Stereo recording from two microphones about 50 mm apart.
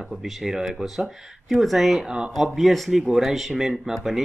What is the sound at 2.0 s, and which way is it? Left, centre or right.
Speech, centre.